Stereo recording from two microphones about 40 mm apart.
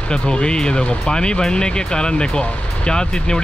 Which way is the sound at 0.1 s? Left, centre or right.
Left.